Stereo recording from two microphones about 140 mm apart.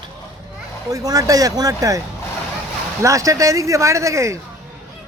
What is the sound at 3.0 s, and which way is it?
Speech, 25° right (ahead or behind).